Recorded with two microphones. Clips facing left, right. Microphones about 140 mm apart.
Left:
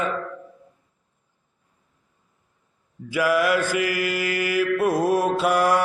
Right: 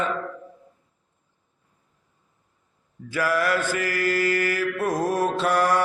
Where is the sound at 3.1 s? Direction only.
10° left (ahead or behind).